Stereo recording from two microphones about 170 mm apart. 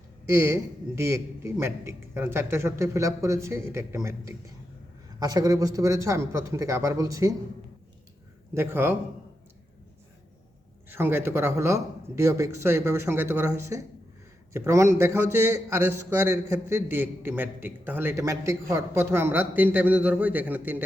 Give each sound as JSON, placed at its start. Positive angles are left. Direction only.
{"t": 0.3, "sound": "a man's voice", "side_deg": -15}
{"t": 8.5, "sound": "a man's voice", "side_deg": -15}
{"t": 10.8, "sound": "a man's voice", "side_deg": -15}